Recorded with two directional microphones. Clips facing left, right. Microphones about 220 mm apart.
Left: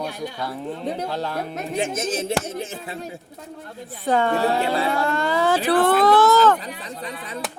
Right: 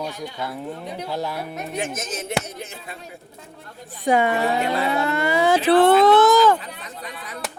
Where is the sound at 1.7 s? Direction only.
30° left (ahead or behind).